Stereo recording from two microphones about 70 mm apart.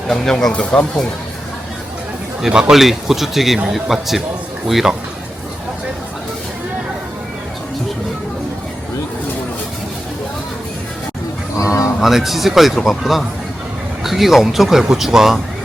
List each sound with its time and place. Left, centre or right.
0.1 s speech: centre
2.5 s speech: centre
11.5 s speech: left
11.9 s speech: centre